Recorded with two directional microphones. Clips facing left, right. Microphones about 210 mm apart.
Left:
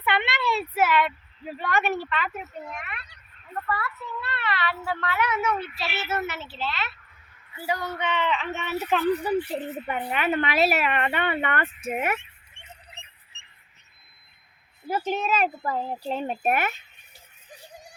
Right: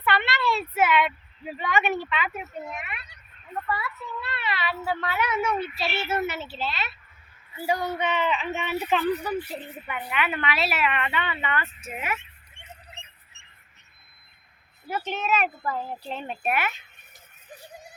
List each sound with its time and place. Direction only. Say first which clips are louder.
0.0 s speech: right 1 dB; 15° left (ahead or behind); by 8.8 s centre (ahead or behind)
9.2 s speech: left 5 dB; 30° left (ahead or behind); by 12.2 s 50° left (ahead or behind)
14.8 s a child's voice: left 2 dB; 30° left (ahead or behind)
16.0 s speech: left 5 dB; 40° left (ahead or behind)